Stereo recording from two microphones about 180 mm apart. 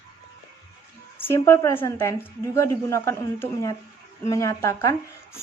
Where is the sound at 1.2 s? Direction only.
15° left (ahead or behind).